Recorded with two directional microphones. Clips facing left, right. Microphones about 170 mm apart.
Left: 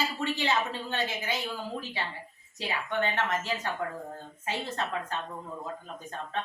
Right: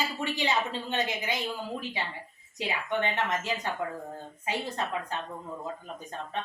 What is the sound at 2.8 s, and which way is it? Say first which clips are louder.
Speech: even; 15° right (ahead or behind).